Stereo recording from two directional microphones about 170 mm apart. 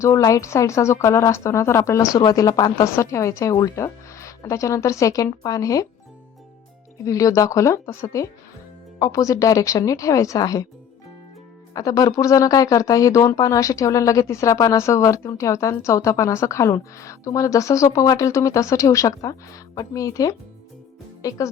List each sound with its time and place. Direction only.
0.0 s speech: 20° left (ahead or behind)
7.0 s speech: 20° left (ahead or behind)
11.7 s speech: 20° left (ahead or behind)